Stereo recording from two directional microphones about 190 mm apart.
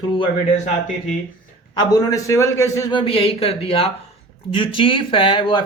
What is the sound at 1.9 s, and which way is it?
Speech, 20° left (ahead or behind).